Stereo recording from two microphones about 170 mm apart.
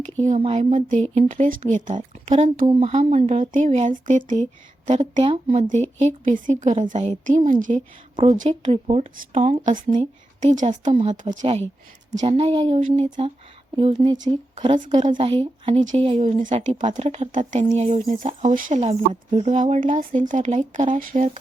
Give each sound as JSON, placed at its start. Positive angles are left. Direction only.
{"t": 0.3, "sound": "a woman's voice", "side_deg": -40}
{"t": 5.5, "sound": "a woman's voice", "side_deg": -45}
{"t": 8.1, "sound": "a woman's voice", "side_deg": -30}
{"t": 12.2, "sound": "speech", "side_deg": -35}
{"t": 12.8, "sound": "a woman's voice", "side_deg": -50}
{"t": 13.7, "sound": "speech", "side_deg": -35}
{"t": 15.3, "sound": "speech", "side_deg": -35}
{"t": 16.6, "sound": "a woman's voice", "side_deg": -50}